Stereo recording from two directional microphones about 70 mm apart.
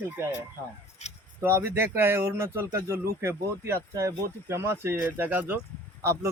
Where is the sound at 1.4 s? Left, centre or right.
Right.